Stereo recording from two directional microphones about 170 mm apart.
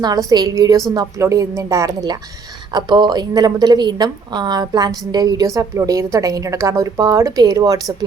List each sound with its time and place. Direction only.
0.0 s a woman's voice: 20° right (ahead or behind)